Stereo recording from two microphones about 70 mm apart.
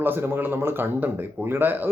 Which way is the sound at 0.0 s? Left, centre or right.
Right.